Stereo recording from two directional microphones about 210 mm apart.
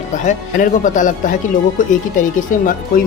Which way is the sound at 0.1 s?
40° left (ahead or behind).